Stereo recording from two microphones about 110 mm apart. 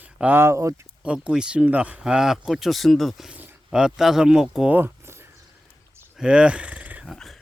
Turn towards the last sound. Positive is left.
turn(degrees=0)  # may be behind; listen again after turning